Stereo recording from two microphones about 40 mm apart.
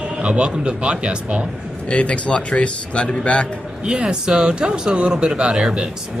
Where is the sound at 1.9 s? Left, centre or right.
Left.